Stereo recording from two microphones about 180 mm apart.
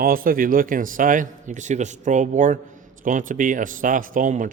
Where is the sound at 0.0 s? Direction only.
50° right (ahead or behind).